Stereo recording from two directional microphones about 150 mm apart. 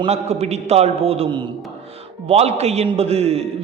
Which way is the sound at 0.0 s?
45° right (ahead or behind).